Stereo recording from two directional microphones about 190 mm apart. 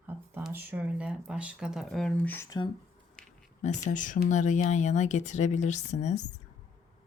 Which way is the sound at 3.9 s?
40° left (ahead or behind).